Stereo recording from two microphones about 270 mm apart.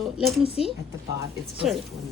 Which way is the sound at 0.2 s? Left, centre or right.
Centre.